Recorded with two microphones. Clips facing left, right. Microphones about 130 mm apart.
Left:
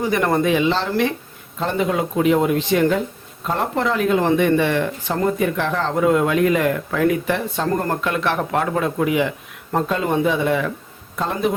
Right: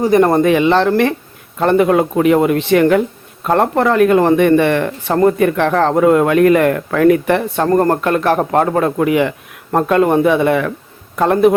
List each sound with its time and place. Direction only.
0.0 s speech: 40° right (ahead or behind)
0.4 s speech: 60° right (ahead or behind)